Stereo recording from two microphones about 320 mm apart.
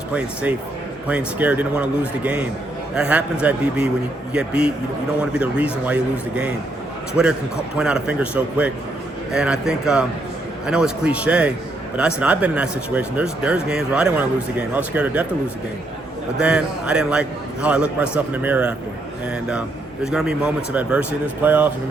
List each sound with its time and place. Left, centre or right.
1.0 s speech: centre
16.4 s speech: centre